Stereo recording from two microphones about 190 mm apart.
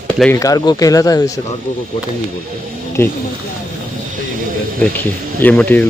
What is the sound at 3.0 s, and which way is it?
Speech, 15° left (ahead or behind).